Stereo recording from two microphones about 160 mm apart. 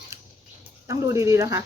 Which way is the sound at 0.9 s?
20° right (ahead or behind).